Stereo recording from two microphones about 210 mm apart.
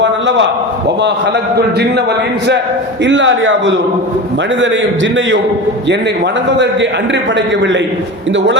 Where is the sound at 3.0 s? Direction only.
60° right (ahead or behind).